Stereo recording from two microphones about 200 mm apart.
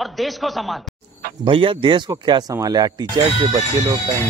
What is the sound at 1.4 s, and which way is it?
Speech, 25° right (ahead or behind).